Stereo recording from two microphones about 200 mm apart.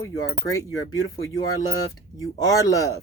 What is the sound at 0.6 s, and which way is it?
Speech, 15° left (ahead or behind).